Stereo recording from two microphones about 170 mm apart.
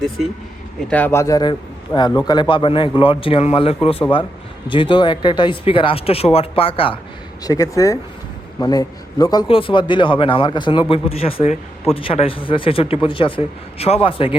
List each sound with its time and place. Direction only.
0.9 s a man's voice: 10° left (ahead or behind); by 7.0 s 30° left (ahead or behind)
7.4 s a man's voice: 20° left (ahead or behind)